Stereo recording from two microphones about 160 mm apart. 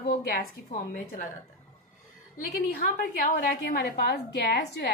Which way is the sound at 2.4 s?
65° left (ahead or behind).